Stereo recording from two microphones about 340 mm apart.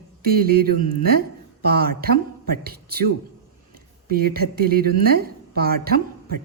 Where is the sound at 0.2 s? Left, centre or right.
Right.